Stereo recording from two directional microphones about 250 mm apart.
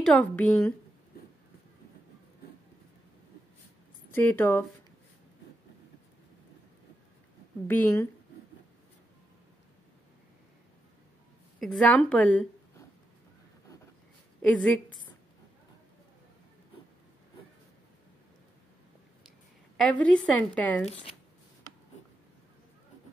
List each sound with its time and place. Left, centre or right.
0.0 s a woman's voice: centre
4.1 s speech: centre
7.6 s speech: centre
11.6 s a woman's voice: centre
19.8 s a woman's voice: centre
20.8 s speech: left